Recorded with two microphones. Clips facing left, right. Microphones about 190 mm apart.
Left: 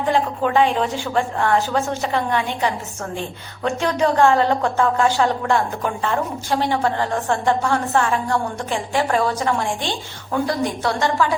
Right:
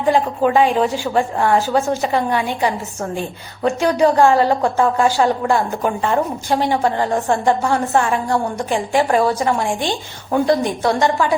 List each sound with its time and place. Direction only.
0.0 s a woman's voice: 10° right (ahead or behind)